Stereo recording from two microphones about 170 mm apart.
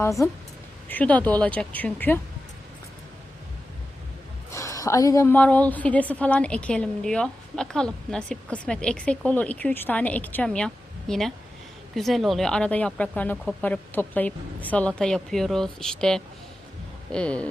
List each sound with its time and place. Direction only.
0.0 s a woman's voice: 20° left (ahead or behind)
4.5 s a woman's voice: 20° left (ahead or behind)